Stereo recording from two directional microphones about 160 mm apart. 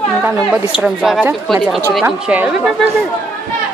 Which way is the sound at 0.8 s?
5° right (ahead or behind).